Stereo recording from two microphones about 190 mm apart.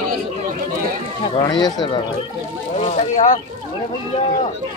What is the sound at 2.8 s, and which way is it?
Speech, 35° left (ahead or behind).